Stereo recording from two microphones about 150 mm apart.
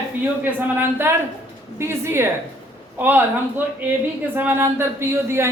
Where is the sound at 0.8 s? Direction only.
15° right (ahead or behind).